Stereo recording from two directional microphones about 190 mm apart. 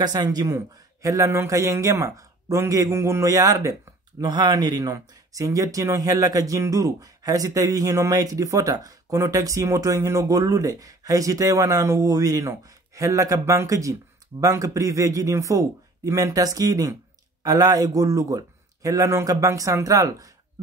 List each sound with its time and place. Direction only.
0.0 s a man's voice: 20° right (ahead or behind)